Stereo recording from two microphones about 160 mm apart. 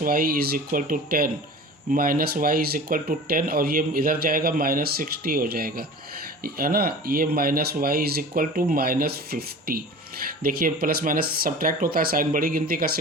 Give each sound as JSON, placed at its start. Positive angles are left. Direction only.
{"t": 0.0, "sound": "speech", "side_deg": -65}